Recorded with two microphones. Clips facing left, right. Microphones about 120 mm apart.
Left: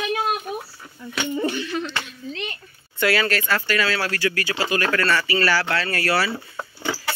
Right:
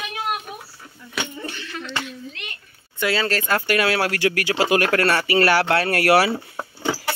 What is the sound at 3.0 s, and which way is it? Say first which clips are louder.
Speech: left 1 dB; 25° right (ahead or behind).